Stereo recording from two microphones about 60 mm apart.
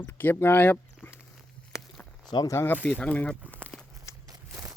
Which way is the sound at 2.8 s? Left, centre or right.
Left.